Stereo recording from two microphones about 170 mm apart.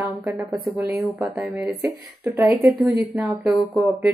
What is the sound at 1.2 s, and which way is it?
Speech, centre (ahead or behind).